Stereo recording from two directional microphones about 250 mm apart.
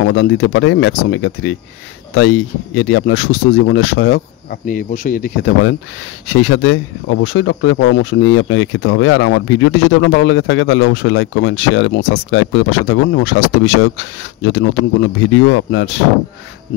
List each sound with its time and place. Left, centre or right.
0.0 s speech: left